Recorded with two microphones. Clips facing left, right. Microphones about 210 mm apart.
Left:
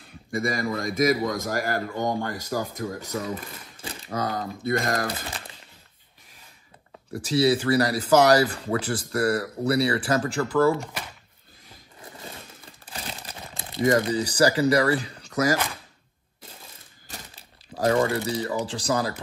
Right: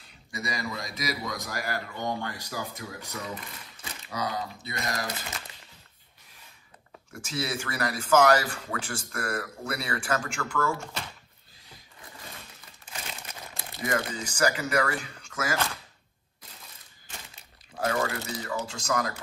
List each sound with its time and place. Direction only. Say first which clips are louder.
0.3 s a man's voice: left 8 dB; 50° left (ahead or behind)
3.8 s typewriter: left 7 dB; 30° left (ahead or behind)
4.1 s a man's voice: left 4 dB; 50° left (ahead or behind)
7.2 s speech: left 11 dB; 35° left (ahead or behind)
10.7 s speech: left 7 dB; 15° left (ahead or behind)
12.8 s crumpling: left 4 dB; 35° left (ahead or behind)
13.8 s speech: left 9 dB; 35° left (ahead or behind)
17.1 s crumpling: left 4 dB; 35° left (ahead or behind)
18.7 s speech: left 4 dB; 35° left (ahead or behind)